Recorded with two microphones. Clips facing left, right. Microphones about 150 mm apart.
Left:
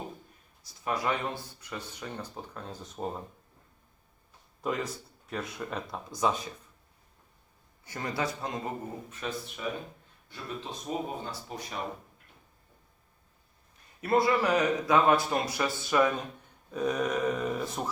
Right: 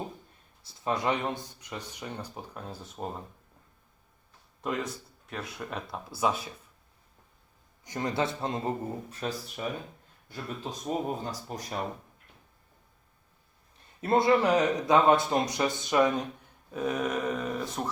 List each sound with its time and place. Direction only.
0.6 s speech: 25° right (ahead or behind); by 3.2 s centre (ahead or behind)
4.6 s speech: centre (ahead or behind)
7.9 s a man's voice: 20° right (ahead or behind); by 11.8 s 40° right (ahead or behind)
13.7 s a man's voice: 25° right (ahead or behind)
16.7 s speech: 5° right (ahead or behind)